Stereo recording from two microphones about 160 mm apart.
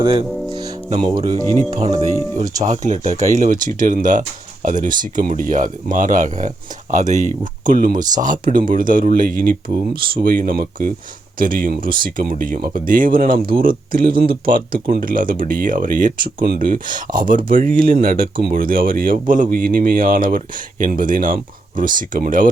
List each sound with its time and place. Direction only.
0.0 s speech: 35° right (ahead or behind)
0.5 s music: 25° right (ahead or behind)
1.0 s speech: 25° right (ahead or behind)
2.6 s speech: 45° right (ahead or behind)